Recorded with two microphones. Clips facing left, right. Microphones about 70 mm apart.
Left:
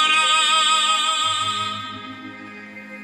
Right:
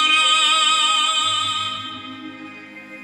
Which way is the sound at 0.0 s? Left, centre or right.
Left.